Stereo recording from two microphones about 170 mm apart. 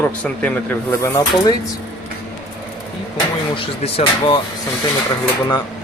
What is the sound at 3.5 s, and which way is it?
Speech, 30° left (ahead or behind).